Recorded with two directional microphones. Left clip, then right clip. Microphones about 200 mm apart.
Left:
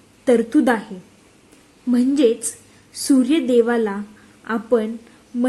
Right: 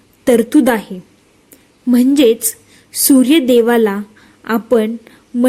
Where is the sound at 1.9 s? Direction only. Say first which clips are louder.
Right 6 dB; 35° right (ahead or behind).